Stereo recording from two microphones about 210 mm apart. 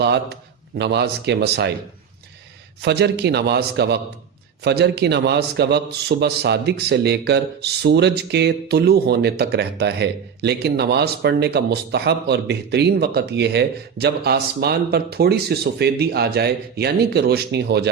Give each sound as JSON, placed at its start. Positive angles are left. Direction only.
{"t": 0.0, "sound": "a man's voice", "side_deg": -55}
{"t": 2.8, "sound": "a man's voice", "side_deg": -50}